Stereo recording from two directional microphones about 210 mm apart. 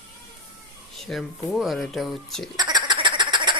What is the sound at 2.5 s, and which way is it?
Frog, 20° right (ahead or behind).